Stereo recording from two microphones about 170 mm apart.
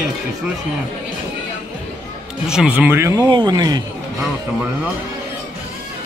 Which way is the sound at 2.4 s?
5° right (ahead or behind).